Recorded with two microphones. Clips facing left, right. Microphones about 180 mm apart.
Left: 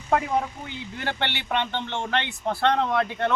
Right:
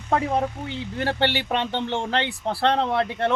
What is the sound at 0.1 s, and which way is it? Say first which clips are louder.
Speech: right 1 dB; 30° right (ahead or behind).